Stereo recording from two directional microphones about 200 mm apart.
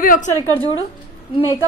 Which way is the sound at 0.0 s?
45° left (ahead or behind).